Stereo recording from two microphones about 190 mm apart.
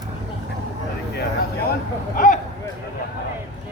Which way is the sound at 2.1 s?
45° left (ahead or behind).